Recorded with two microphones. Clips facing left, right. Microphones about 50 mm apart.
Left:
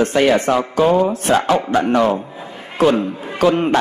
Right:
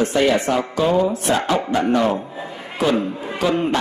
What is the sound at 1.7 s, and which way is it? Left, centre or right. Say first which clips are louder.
Speech: left 2 dB; left.